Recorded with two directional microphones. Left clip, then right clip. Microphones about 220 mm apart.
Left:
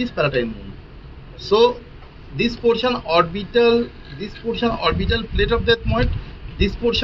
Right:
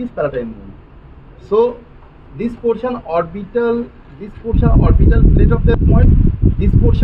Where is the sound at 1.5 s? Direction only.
10° right (ahead or behind).